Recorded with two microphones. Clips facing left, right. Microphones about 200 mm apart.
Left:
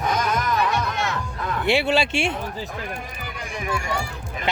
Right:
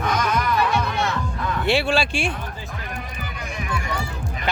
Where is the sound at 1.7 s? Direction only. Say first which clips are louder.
Left 1 dB; 20° left (ahead or behind).